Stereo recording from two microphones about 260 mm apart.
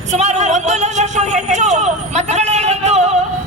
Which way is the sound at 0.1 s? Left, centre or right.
Right.